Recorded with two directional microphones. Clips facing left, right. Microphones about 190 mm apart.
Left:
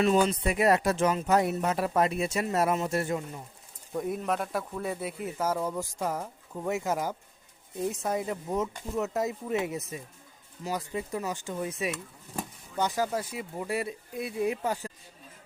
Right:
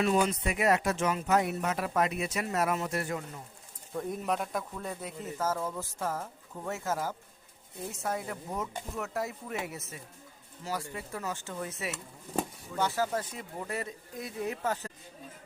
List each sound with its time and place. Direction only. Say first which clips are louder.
0.0 s speech: left 3 dB; 30° left (ahead or behind)
3.9 s speech: left 4 dB; 10° left (ahead or behind)
4.2 s speech: left 2 dB; centre (ahead or behind)